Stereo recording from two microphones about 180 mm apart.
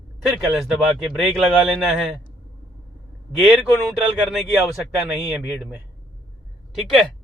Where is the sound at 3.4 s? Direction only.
Centre (ahead or behind).